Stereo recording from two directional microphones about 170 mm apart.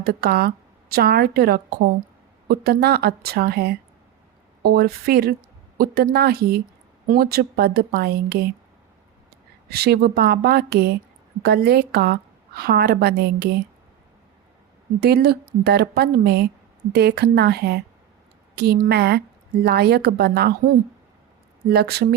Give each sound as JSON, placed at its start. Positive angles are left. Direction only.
{"t": 0.0, "sound": "a woman's voice", "side_deg": -65}
{"t": 9.6, "sound": "a woman's voice", "side_deg": -65}
{"t": 15.0, "sound": "a woman's voice", "side_deg": -70}